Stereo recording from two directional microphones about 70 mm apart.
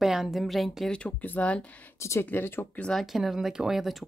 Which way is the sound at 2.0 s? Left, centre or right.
Left.